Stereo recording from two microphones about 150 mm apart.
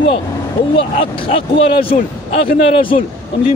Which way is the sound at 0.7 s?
35° left (ahead or behind).